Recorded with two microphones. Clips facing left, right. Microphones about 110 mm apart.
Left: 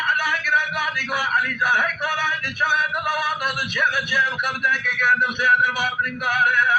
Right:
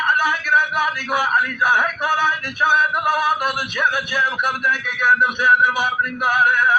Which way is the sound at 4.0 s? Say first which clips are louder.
Right 2 dB; 25° right (ahead or behind).